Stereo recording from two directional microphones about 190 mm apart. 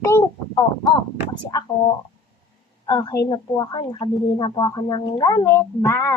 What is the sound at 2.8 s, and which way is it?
A woman's voice, 20° left (ahead or behind).